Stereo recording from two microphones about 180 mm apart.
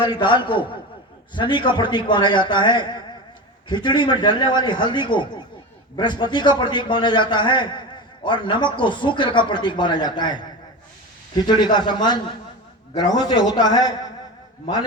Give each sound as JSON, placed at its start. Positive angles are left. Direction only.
{"t": 0.0, "sound": "a man's voice", "side_deg": 25}